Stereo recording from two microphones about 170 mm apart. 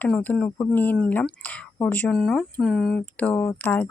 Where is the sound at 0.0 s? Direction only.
10° left (ahead or behind).